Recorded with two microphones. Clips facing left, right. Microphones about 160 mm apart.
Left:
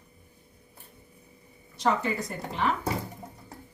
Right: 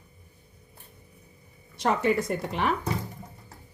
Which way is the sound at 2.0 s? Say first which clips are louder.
Right 6 dB; 65° right (ahead or behind).